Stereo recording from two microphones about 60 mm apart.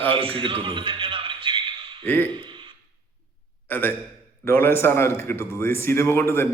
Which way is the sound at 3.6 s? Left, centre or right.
Left.